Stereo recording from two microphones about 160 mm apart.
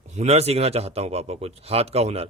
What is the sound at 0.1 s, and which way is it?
A man's voice, 45° right (ahead or behind).